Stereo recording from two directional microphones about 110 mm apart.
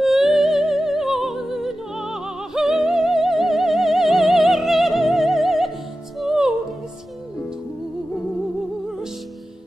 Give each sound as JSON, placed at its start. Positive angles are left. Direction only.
{"t": 0.0, "sound": "music", "side_deg": -5}